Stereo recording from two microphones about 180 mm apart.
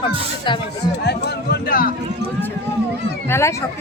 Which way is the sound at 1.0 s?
65° left (ahead or behind).